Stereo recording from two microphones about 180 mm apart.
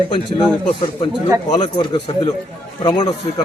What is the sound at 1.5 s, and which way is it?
A man's voice, 25° left (ahead or behind).